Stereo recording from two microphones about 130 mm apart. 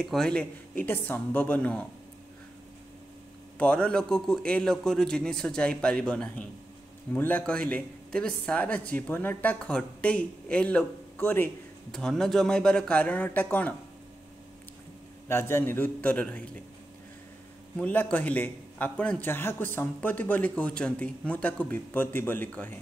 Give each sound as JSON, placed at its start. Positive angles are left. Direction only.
{"t": 0.0, "sound": "speech", "side_deg": 5}
{"t": 3.5, "sound": "speech", "side_deg": 10}
{"t": 15.2, "sound": "speech", "side_deg": 20}
{"t": 17.7, "sound": "speech", "side_deg": 15}